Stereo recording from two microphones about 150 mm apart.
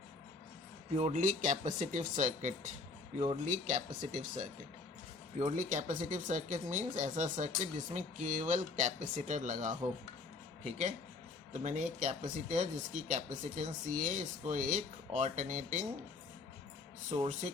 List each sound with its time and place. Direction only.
0.9 s speech: 50° right (ahead or behind)
17.1 s speech: 40° right (ahead or behind)